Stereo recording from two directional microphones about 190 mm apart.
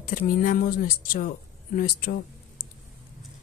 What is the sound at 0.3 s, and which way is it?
Speech, 45° left (ahead or behind).